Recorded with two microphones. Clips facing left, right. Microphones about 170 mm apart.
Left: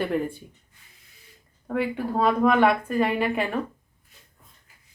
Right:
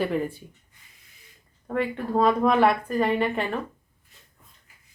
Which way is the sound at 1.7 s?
5° left (ahead or behind).